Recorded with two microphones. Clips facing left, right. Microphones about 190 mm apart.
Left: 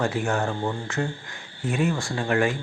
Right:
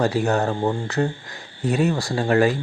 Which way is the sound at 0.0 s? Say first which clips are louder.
Right 5 dB; 35° right (ahead or behind).